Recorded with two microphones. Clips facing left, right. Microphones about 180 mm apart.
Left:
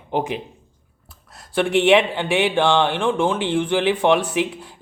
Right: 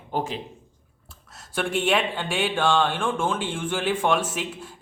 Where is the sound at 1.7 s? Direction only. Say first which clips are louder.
Left 8 dB; 75° left (ahead or behind).